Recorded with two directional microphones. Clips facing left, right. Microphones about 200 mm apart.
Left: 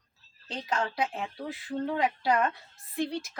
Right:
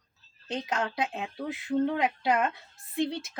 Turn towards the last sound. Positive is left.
turn(degrees=-25)  # may be behind; listen again after turning